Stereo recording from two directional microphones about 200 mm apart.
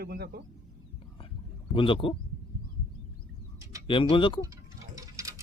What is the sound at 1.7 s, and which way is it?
Speech, 25° left (ahead or behind).